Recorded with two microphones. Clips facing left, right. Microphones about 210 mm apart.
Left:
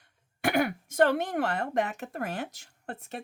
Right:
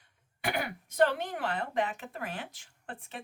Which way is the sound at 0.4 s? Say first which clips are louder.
Left 7 dB; 50° left (ahead or behind).